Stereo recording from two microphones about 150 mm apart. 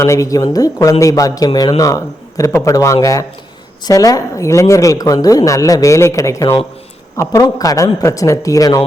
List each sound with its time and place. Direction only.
0.0 s speech: 20° left (ahead or behind)